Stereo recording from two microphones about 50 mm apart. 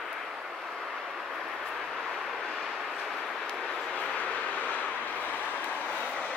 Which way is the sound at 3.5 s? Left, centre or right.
Centre.